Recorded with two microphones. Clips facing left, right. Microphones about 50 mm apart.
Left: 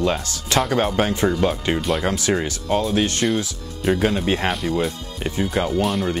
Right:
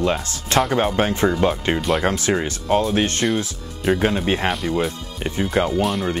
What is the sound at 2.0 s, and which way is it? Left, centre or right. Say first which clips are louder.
Speech: right 1 dB; right.